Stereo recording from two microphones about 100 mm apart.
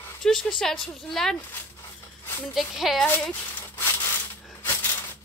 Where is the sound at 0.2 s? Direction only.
5° left (ahead or behind).